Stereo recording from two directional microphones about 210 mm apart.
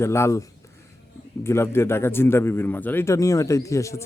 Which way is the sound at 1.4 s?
10° left (ahead or behind).